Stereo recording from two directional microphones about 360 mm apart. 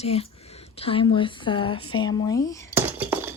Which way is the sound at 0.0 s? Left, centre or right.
Centre.